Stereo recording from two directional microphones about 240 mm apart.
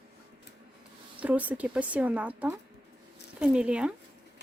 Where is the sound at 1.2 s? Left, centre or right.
Centre.